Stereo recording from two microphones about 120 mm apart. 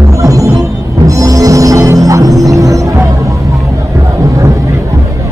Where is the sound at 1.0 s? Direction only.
30° right (ahead or behind).